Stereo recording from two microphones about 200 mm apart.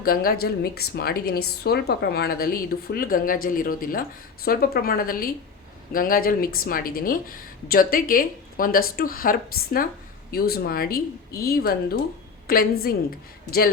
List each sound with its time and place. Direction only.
0.0 s a woman's voice: 45° left (ahead or behind)